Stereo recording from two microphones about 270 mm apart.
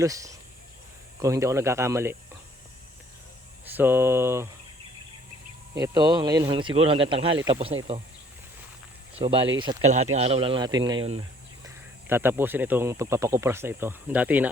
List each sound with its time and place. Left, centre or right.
0.0 s speech: centre
3.7 s speech: centre
5.8 s speech: centre
9.1 s speech: centre
11.6 s speech: centre